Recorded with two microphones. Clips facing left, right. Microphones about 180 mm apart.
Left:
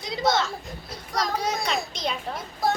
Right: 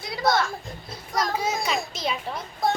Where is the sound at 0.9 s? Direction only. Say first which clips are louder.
Right 1 dB; centre (ahead or behind).